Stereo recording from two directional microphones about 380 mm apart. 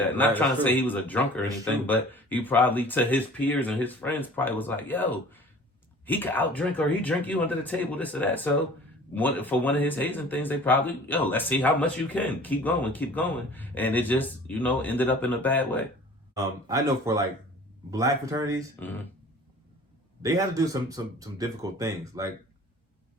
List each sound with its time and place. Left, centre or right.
0.3 s speech: centre
16.3 s speech: centre
20.2 s speech: centre